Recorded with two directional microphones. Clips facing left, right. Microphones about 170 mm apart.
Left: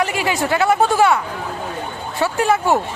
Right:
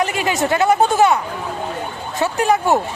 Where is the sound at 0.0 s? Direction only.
20° right (ahead or behind).